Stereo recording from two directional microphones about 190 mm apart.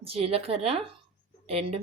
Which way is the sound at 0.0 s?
30° right (ahead or behind).